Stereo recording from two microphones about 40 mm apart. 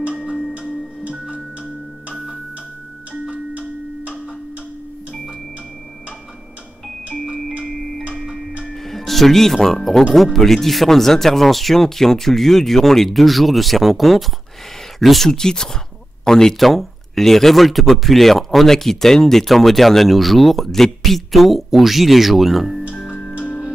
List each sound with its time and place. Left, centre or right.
3.1 s music: right
7.6 s music: centre
8.7 s speech: centre
15.2 s speech: centre
16.5 s speech: centre